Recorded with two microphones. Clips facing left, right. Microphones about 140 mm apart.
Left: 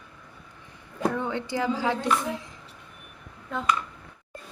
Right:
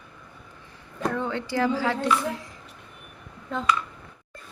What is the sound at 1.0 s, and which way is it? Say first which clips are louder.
A woman's voice: even; 15° left (ahead or behind).